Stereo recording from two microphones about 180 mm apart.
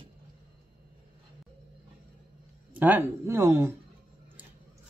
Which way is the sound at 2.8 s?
10° right (ahead or behind).